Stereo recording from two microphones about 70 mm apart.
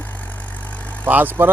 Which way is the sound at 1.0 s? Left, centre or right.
Right.